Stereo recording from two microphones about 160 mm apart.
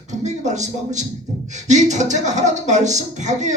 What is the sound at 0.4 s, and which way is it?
Speech, 50° right (ahead or behind).